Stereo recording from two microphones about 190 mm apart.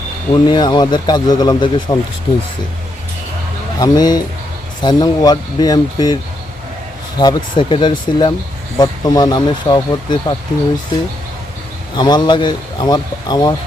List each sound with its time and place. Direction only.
0.3 s speech: 20° left (ahead or behind)
3.8 s speech: 20° left (ahead or behind)
7.2 s speech: 20° left (ahead or behind)
11.9 s speech: 20° left (ahead or behind)